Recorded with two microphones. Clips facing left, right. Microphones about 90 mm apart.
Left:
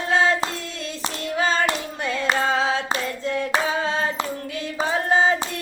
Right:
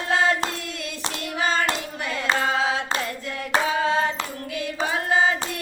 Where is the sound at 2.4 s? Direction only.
30° left (ahead or behind).